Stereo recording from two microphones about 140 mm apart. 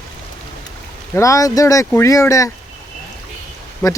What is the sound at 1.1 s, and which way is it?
Speech, 25° left (ahead or behind).